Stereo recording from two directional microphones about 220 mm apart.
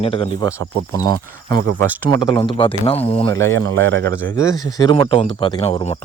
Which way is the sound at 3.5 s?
65° right (ahead or behind).